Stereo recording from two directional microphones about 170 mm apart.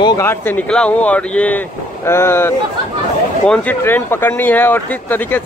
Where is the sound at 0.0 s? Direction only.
25° left (ahead or behind).